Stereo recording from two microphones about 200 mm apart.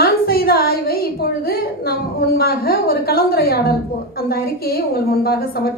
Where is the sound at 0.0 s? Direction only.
50° left (ahead or behind).